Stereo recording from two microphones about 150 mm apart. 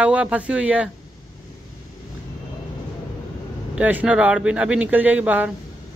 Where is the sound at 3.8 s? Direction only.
10° right (ahead or behind).